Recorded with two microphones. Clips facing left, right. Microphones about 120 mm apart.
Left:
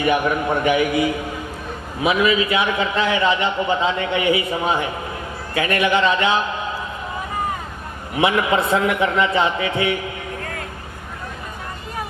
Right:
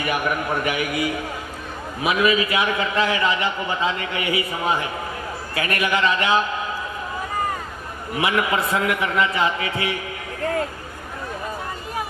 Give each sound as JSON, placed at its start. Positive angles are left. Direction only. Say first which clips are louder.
{"t": 0.6, "sound": "a man's voice", "louder": "left 6 dB", "side_deg": 25}
{"t": 8.2, "sound": "a man's voice", "louder": "left 4 dB", "side_deg": 25}